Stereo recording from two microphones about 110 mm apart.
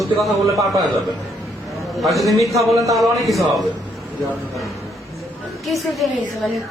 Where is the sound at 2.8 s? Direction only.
30° right (ahead or behind).